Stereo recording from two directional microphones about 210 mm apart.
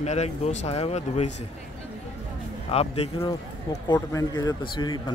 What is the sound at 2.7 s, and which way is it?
Speech, 30° left (ahead or behind).